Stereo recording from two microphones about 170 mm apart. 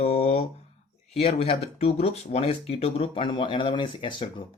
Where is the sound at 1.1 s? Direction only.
35° left (ahead or behind).